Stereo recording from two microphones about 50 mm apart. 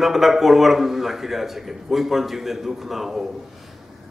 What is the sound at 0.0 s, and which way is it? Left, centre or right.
A man's voice, centre.